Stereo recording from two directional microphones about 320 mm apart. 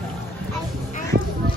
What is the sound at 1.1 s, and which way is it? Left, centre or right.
Music, right.